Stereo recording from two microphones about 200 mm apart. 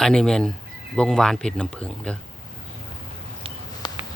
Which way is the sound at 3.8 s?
20° left (ahead or behind).